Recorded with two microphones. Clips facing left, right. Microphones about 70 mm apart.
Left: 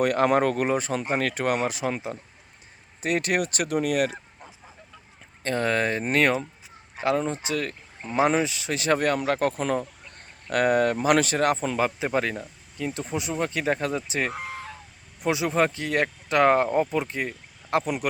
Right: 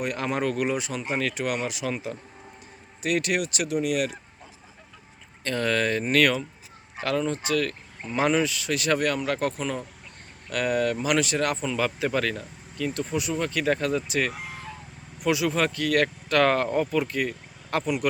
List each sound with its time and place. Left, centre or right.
0.0 s speech: left
5.4 s speech: left